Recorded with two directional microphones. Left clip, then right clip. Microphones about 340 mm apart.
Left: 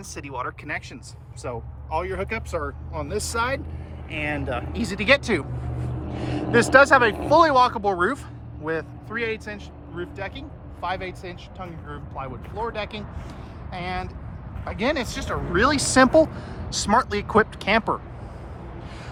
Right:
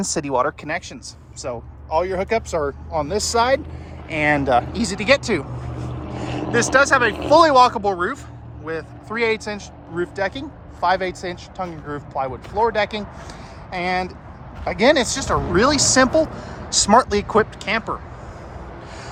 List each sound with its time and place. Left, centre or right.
0.0 s speech: centre
6.1 s vehicle: centre
6.5 s speech: centre
9.1 s speech: centre